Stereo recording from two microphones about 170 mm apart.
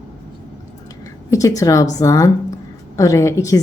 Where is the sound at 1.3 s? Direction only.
20° left (ahead or behind).